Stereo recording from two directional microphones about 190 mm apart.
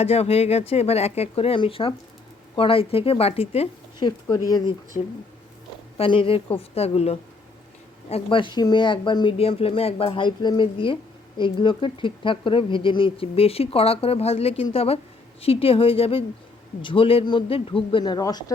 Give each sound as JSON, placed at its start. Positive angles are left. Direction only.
{"t": 0.0, "sound": "speech", "side_deg": 30}
{"t": 4.3, "sound": "speech", "side_deg": 20}
{"t": 6.0, "sound": "speech", "side_deg": 30}